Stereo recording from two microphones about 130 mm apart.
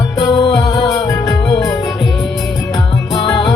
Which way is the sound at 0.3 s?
35° left (ahead or behind).